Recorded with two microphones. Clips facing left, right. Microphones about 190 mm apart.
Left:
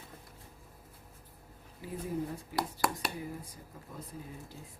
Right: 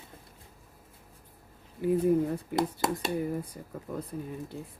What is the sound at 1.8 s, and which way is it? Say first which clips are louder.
Speech: right 12 dB; 60° right (ahead or behind).